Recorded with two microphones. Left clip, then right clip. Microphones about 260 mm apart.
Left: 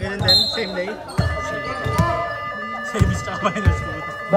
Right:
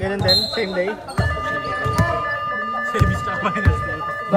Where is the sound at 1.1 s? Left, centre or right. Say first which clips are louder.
Right 2 dB; centre.